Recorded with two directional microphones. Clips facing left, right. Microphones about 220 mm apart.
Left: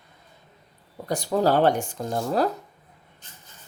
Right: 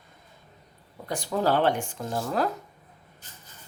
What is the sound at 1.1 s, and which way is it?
Speech, 40° left (ahead or behind).